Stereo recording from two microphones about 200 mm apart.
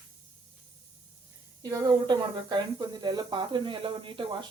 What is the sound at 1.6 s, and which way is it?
Speech, 20° right (ahead or behind).